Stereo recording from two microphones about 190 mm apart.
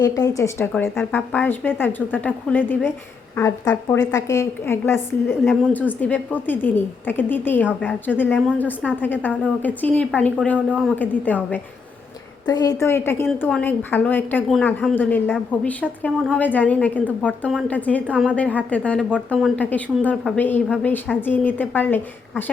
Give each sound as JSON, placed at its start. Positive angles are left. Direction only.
{"t": 0.0, "sound": "a woman's voice", "side_deg": 20}
{"t": 10.9, "sound": "a woman's voice", "side_deg": 10}
{"t": 12.5, "sound": "a woman's voice", "side_deg": 20}
{"t": 18.0, "sound": "a woman's voice", "side_deg": -5}
{"t": 18.3, "sound": "a woman's voice", "side_deg": 5}